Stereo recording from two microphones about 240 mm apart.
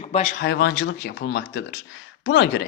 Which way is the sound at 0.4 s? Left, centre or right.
Left.